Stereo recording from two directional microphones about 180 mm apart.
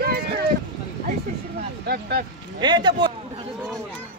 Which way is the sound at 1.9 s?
60° right (ahead or behind).